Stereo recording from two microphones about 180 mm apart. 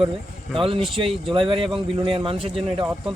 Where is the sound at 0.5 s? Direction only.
30° right (ahead or behind).